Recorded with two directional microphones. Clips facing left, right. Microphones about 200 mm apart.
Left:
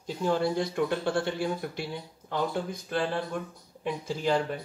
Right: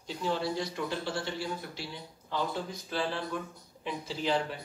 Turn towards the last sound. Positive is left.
turn(degrees=50)  # may be behind; listen again after turning